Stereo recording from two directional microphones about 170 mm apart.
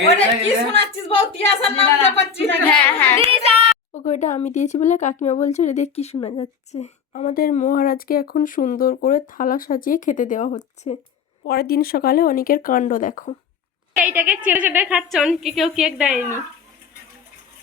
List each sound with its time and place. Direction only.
0.4 s speech: 35° left (ahead or behind)
2.6 s a woman's voice: 10° left (ahead or behind)
3.3 s a woman's voice: 35° right (ahead or behind)
3.9 s speech: 45° left (ahead or behind)
11.4 s speech: 65° left (ahead or behind); by 13.3 s 50° left (ahead or behind)
14.0 s a woman's voice: 10° right (ahead or behind)